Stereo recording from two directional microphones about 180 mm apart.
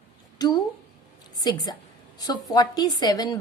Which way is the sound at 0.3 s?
20° left (ahead or behind).